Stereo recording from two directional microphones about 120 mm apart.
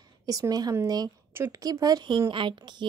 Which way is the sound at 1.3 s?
20° right (ahead or behind).